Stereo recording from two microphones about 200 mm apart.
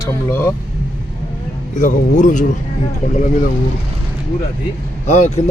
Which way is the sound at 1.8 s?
40° left (ahead or behind).